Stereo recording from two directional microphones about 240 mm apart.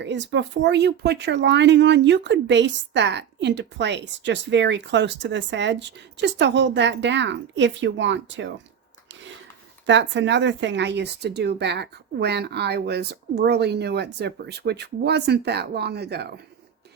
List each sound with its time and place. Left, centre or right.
0.0 s speech: right
9.8 s speech: right